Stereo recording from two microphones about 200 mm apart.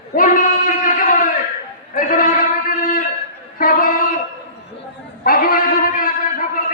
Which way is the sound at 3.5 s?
45° left (ahead or behind).